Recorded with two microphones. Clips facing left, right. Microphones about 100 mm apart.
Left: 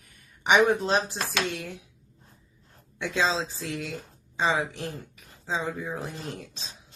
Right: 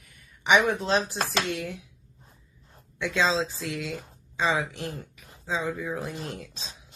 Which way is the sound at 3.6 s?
35° left (ahead or behind).